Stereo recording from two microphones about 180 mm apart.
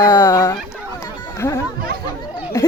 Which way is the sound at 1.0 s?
15° left (ahead or behind).